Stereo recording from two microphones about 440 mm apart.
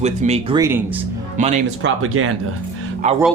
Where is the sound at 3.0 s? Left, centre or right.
Centre.